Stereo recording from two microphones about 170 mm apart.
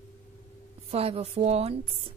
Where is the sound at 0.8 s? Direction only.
35° right (ahead or behind).